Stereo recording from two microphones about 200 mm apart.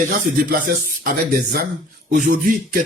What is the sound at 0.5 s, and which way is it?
Speech, 45° right (ahead or behind).